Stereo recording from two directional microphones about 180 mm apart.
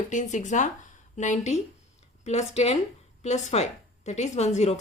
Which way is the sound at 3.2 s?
40° left (ahead or behind).